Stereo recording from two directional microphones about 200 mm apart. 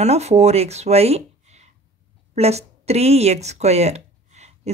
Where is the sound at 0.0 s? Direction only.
35° right (ahead or behind).